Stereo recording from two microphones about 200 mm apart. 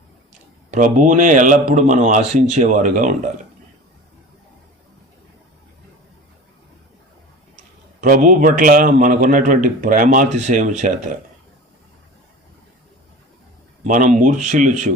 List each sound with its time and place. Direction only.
0.7 s speech: 40° right (ahead or behind)
8.0 s a man's voice: 45° right (ahead or behind)
13.8 s speech: 40° right (ahead or behind)